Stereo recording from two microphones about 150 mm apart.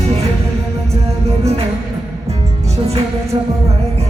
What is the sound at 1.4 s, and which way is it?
Music, 45° right (ahead or behind).